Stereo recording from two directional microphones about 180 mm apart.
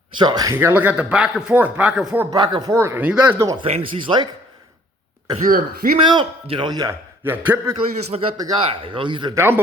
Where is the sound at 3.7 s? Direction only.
30° right (ahead or behind).